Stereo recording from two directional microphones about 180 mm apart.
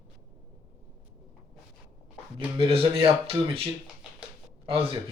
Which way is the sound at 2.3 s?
30° right (ahead or behind).